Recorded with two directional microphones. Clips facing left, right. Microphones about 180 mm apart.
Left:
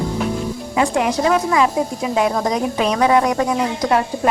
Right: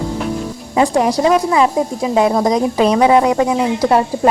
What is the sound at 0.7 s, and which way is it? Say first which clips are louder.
Speech: right 4 dB; 35° right (ahead or behind).